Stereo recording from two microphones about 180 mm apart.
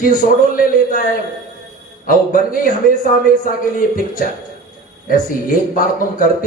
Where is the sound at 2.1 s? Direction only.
50° left (ahead or behind).